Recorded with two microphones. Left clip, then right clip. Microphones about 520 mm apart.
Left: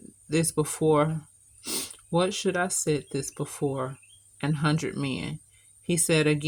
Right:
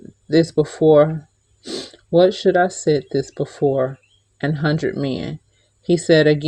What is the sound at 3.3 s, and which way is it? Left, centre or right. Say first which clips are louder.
Speech: right 11 dB; left.